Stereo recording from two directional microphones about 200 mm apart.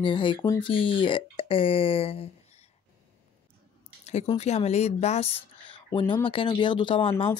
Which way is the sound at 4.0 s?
35° left (ahead or behind).